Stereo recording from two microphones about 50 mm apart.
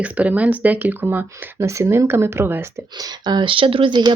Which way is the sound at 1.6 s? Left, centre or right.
Right.